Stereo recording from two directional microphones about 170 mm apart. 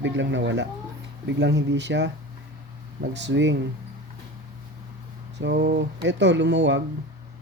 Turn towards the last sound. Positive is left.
turn(degrees=-90)